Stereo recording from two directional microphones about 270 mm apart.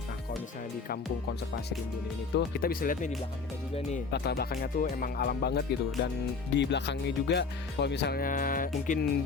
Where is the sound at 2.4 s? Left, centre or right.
Left.